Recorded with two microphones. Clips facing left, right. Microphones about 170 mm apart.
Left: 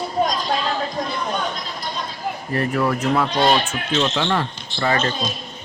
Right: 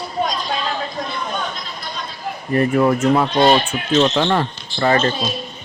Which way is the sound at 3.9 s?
40° right (ahead or behind).